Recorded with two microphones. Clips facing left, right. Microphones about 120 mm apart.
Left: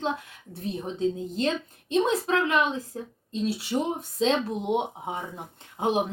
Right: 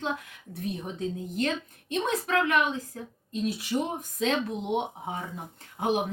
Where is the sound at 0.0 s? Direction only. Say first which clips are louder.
Left 3 dB; 30° left (ahead or behind).